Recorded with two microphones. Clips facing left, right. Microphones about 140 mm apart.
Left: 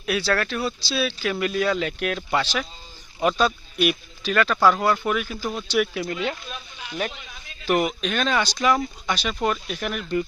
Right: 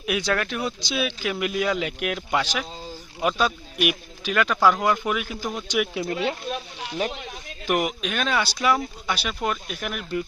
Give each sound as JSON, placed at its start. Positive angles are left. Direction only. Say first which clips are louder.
{"t": 0.0, "sound": "speech", "louder": "left 1 dB", "side_deg": -15}
{"t": 6.4, "sound": "a sound", "louder": "right 7 dB", "side_deg": -60}
{"t": 7.1, "sound": "a man's voice", "louder": "right 7 dB", "side_deg": -60}
{"t": 7.6, "sound": "speech", "louder": "left 2 dB", "side_deg": -10}